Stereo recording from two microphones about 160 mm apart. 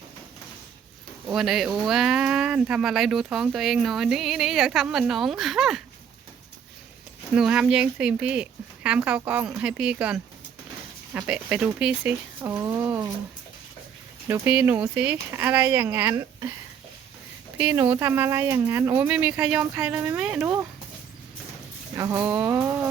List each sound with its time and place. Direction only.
1.3 s speech: centre (ahead or behind)
7.3 s speech: 5° right (ahead or behind)
14.3 s speech: 15° right (ahead or behind)
17.6 s speech: 15° right (ahead or behind)
21.9 s speech: 20° right (ahead or behind)